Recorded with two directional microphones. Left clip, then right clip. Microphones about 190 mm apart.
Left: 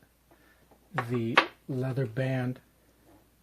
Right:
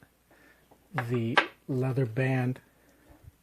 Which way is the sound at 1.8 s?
40° right (ahead or behind).